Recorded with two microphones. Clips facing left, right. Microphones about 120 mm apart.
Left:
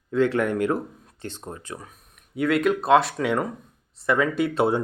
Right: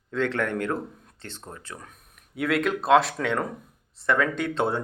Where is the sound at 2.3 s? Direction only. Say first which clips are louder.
Left 4 dB; centre (ahead or behind).